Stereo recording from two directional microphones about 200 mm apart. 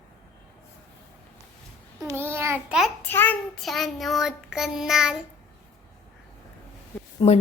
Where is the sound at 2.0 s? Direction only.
15° right (ahead or behind).